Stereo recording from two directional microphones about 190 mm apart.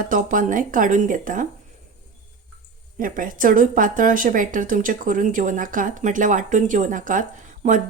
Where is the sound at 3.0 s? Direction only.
45° right (ahead or behind).